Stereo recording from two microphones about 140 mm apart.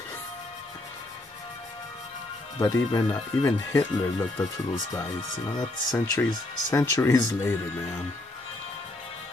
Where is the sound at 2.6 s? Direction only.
25° left (ahead or behind).